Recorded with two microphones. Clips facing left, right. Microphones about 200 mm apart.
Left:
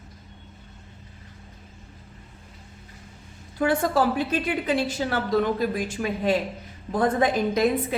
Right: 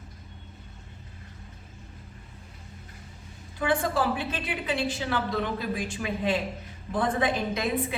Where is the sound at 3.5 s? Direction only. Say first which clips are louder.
Left 4 dB; 40° left (ahead or behind).